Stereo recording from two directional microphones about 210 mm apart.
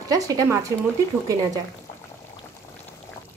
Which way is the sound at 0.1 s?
15° right (ahead or behind).